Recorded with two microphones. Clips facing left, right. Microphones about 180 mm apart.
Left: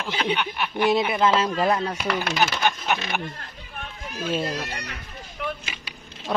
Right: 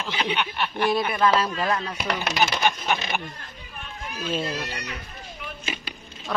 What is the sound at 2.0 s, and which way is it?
Speech, 10° right (ahead or behind).